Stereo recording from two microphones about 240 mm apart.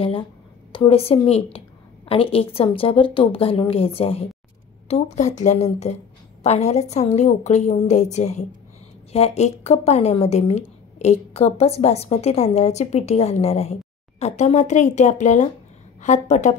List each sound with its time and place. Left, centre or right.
0.7 s a woman's voice: left